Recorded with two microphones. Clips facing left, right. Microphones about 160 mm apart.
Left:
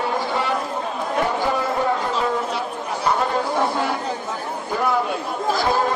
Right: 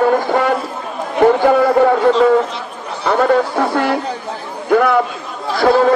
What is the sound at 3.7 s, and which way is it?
A man's voice, 70° right (ahead or behind).